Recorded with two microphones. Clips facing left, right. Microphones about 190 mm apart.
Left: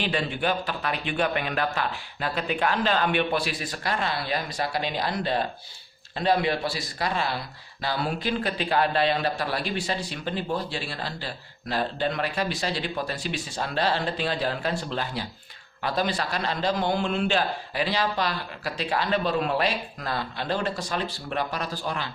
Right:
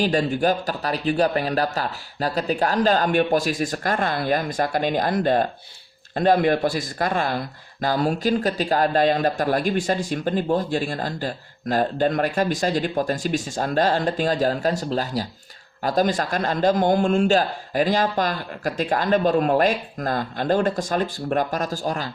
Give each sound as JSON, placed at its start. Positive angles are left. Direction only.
{"t": 0.0, "sound": "speech", "side_deg": -40}